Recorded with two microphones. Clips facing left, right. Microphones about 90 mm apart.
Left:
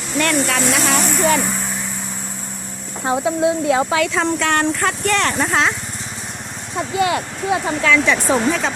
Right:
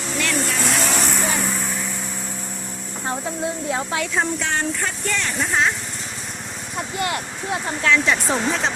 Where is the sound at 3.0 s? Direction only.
90° left.